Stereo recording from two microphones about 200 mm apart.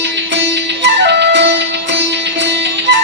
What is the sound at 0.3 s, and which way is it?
Music, 60° right (ahead or behind).